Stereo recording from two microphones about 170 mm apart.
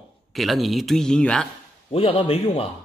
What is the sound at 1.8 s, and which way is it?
Speech, 35° left (ahead or behind).